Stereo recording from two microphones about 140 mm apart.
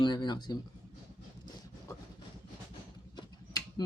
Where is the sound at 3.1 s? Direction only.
30° left (ahead or behind).